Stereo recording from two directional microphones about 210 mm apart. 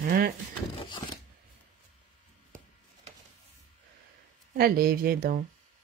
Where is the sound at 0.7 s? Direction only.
25° left (ahead or behind).